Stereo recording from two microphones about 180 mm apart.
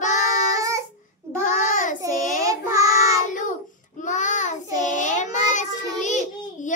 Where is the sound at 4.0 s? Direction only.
45° left (ahead or behind).